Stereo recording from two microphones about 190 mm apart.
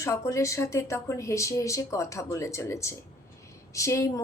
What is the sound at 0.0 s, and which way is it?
A woman's voice, 15° left (ahead or behind).